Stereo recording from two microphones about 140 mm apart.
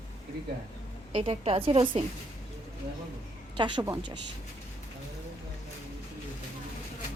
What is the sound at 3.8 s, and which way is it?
Speech, 20° right (ahead or behind).